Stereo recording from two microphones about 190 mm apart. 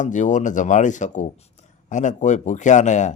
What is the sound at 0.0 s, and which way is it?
A man's voice, 40° left (ahead or behind).